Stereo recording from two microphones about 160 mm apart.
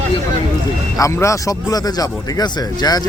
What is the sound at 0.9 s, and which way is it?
A man's voice, 20° left (ahead or behind).